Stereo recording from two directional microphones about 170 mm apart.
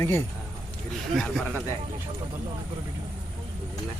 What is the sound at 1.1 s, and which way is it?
Speech, 5° left (ahead or behind).